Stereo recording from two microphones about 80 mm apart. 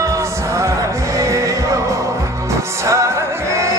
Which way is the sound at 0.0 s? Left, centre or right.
Right.